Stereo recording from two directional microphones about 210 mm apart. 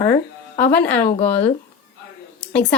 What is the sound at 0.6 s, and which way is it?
Speech, 50° left (ahead or behind).